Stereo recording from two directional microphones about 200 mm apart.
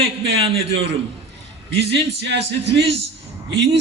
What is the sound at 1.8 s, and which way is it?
A man's voice, 60° right (ahead or behind).